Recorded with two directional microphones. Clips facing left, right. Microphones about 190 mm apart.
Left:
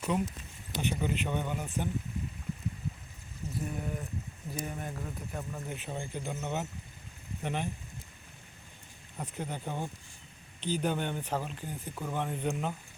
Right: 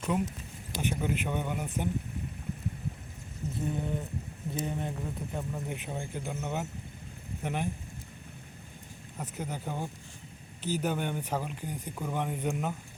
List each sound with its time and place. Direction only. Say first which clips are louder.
0.0 s speech: right 1 dB; 5° right (ahead or behind)
3.6 s a sound: right 4 dB; 25° right (ahead or behind)
4.5 s speech: right 4 dB; 25° right (ahead or behind)
9.1 s speech: even; centre (ahead or behind)